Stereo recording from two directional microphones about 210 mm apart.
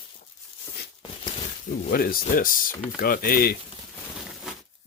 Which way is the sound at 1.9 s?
45° left (ahead or behind).